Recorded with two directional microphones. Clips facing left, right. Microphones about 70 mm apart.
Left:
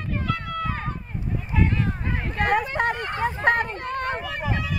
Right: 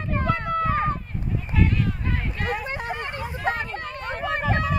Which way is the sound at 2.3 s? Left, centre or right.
Left.